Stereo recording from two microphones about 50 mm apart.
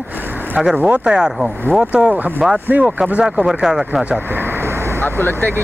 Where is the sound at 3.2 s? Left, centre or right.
Centre.